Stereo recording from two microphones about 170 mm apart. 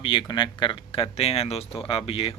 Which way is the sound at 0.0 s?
30° left (ahead or behind).